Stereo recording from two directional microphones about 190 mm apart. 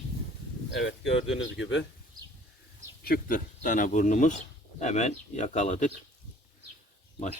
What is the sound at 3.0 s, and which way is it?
Speech, 50° left (ahead or behind).